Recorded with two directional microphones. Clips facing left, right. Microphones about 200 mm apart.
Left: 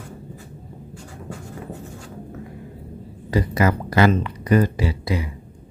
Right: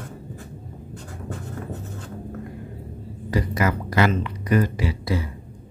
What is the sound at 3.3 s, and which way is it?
Speech, 30° left (ahead or behind).